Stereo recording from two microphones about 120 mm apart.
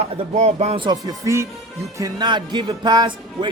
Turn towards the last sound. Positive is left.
turn(degrees=-40)  # may be behind; listen again after turning